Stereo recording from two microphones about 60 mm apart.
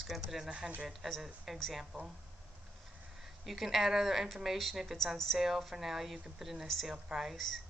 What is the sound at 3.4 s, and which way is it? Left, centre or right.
A woman's voice, centre.